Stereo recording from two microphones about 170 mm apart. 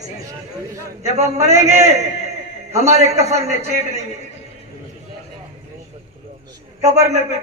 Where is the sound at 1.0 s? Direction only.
40° right (ahead or behind).